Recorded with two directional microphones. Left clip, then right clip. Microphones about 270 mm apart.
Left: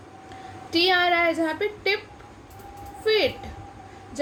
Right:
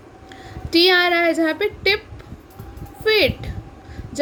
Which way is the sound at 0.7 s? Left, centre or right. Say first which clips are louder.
Right 5 dB; right.